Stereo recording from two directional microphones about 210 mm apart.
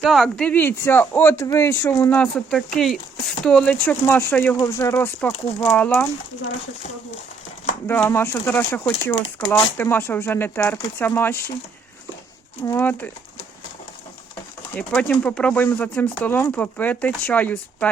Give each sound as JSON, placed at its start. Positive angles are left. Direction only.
{"t": 0.0, "sound": "speech", "side_deg": 0}
{"t": 7.9, "sound": "speech", "side_deg": 10}
{"t": 9.1, "sound": "speech", "side_deg": 25}
{"t": 9.7, "sound": "speech", "side_deg": 10}
{"t": 12.6, "sound": "speech", "side_deg": 10}
{"t": 14.8, "sound": "speech", "side_deg": 5}